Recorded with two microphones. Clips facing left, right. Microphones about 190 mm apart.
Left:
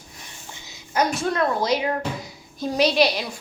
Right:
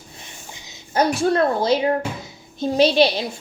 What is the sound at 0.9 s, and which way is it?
A woman's voice, 30° right (ahead or behind).